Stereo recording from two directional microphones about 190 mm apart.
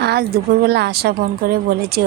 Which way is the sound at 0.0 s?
60° right (ahead or behind).